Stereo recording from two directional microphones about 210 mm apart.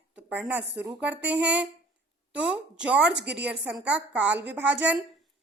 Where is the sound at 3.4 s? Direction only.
5° right (ahead or behind).